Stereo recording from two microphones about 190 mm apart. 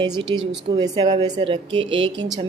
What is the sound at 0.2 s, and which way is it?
Speech, 25° right (ahead or behind).